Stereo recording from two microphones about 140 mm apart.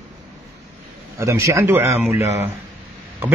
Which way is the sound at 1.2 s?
20° right (ahead or behind).